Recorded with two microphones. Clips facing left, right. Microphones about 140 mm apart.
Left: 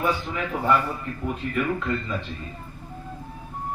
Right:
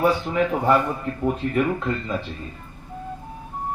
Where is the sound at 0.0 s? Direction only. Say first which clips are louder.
Right 6 dB; 35° right (ahead or behind).